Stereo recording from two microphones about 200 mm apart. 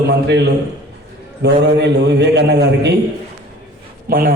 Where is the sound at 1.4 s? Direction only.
60° right (ahead or behind).